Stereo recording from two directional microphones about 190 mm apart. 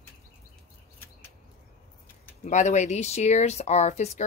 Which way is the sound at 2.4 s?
40° left (ahead or behind).